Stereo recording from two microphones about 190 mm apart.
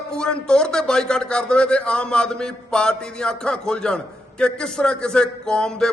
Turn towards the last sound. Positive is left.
turn(degrees=5)  # may be behind; listen again after turning